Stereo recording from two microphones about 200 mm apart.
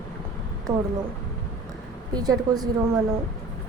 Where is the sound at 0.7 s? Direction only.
15° right (ahead or behind).